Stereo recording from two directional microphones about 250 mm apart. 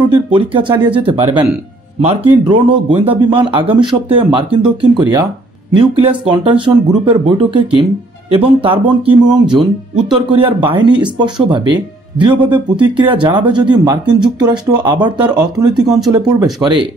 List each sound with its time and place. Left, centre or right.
0.0 s speech: centre